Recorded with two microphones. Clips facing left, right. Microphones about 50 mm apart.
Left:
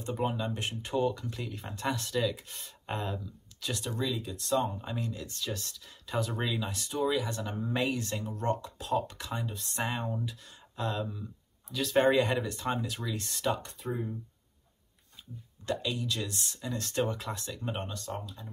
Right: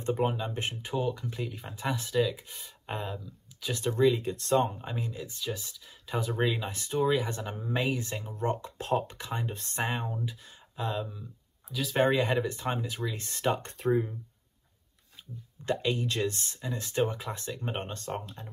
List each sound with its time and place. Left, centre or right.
0.2 s speech: centre
3.7 s speech: right
4.6 s speech: centre
7.7 s speech: centre
8.6 s speech: right
9.0 s speech: right
9.5 s speech: right
9.8 s speech: centre; by 13.7 s right
13.7 s speech: right
15.6 s speech: right
16.6 s speech: centre; by 18.5 s right